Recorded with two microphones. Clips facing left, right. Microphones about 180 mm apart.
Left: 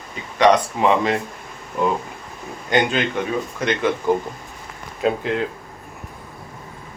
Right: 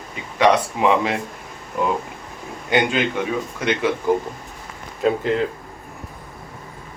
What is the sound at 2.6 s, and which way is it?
Speech, 10° right (ahead or behind).